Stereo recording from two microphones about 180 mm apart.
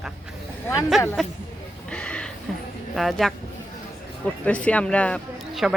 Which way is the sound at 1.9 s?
5° left (ahead or behind).